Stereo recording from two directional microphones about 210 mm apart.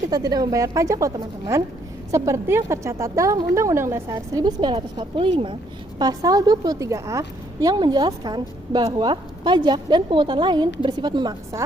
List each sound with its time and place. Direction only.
0.1 s a woman's voice: 20° right (ahead or behind)